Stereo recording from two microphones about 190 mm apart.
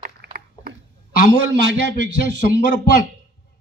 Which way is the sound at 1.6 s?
65° right (ahead or behind).